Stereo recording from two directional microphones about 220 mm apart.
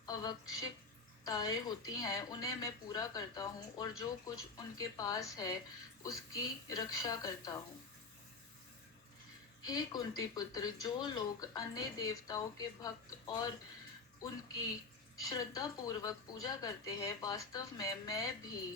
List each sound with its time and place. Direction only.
0.0 s speech: 15° left (ahead or behind)
9.6 s speech: 20° left (ahead or behind)
15.2 s speech: 15° left (ahead or behind)